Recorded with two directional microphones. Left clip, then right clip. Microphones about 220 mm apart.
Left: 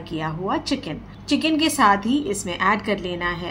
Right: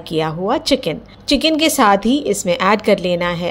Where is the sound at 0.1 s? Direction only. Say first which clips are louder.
Right 7 dB; 35° right (ahead or behind).